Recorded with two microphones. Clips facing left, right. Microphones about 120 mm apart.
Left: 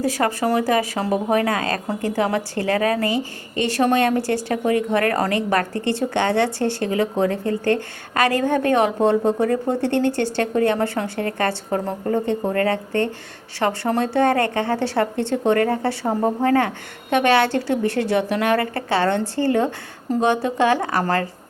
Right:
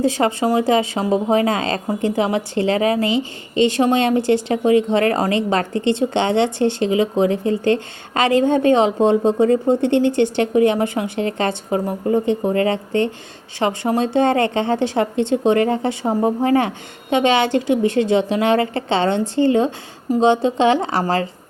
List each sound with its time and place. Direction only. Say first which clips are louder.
0.0 s speech: right 3 dB; 20° right (ahead or behind)